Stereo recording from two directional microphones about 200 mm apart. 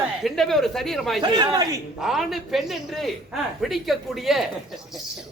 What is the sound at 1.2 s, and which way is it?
Speech, 20° right (ahead or behind).